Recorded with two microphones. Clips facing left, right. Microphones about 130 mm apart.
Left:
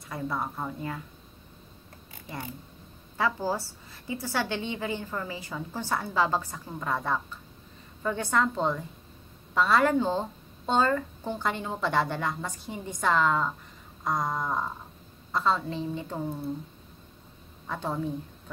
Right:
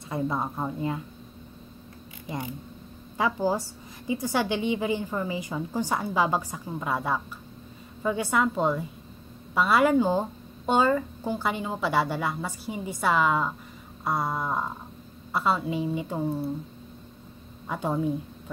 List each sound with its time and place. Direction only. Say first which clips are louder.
0.1 s speech: right 4 dB; 20° right (ahead or behind)
3.2 s a woman's voice: right 3 dB; 15° right (ahead or behind)
17.6 s a woman's voice: right 4 dB; 15° right (ahead or behind)